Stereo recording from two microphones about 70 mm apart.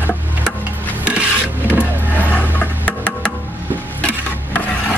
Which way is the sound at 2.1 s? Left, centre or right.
Left.